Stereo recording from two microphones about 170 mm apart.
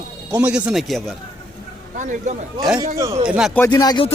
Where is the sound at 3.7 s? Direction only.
25° left (ahead or behind).